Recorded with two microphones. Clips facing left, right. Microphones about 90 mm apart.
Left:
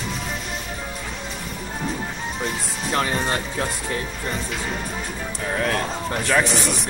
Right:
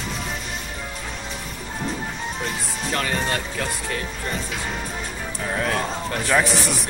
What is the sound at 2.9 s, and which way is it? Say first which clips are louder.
Speech: left 3 dB; 30° left (ahead or behind).